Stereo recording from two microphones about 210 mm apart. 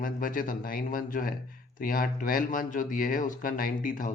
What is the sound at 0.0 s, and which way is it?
Speech, 40° left (ahead or behind).